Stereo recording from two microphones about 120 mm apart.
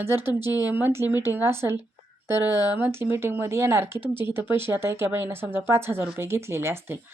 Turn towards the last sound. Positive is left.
turn(degrees=-20)  # may be behind; listen again after turning